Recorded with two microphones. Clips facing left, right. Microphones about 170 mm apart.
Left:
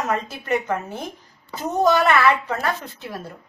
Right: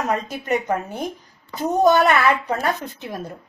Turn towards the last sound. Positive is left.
turn(degrees=-20)  # may be behind; listen again after turning